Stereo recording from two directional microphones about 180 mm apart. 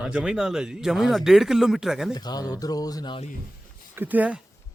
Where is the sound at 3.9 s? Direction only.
10° right (ahead or behind).